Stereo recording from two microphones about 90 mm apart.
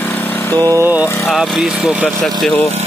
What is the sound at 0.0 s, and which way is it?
Vehicle, 20° left (ahead or behind).